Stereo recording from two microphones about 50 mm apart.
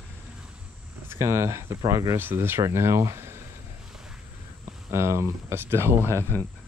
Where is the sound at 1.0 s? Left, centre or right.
Right.